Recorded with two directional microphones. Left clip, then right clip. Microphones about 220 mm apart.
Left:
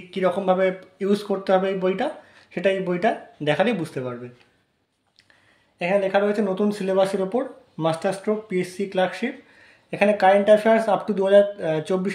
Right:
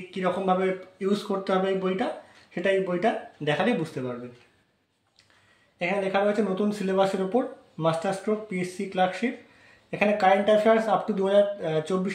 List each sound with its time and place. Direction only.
0.1 s speech: 50° left (ahead or behind)
5.8 s speech: 50° left (ahead or behind)